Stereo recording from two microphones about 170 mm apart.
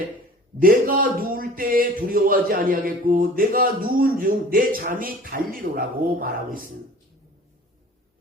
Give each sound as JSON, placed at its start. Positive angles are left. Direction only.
{"t": 0.6, "sound": "speech", "side_deg": -55}